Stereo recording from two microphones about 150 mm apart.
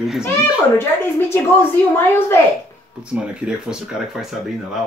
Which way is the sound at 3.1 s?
10° right (ahead or behind).